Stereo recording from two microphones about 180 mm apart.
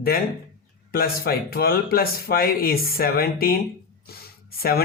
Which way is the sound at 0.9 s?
55° left (ahead or behind).